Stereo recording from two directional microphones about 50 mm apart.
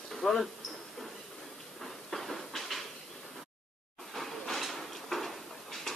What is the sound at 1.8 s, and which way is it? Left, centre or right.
Train, centre.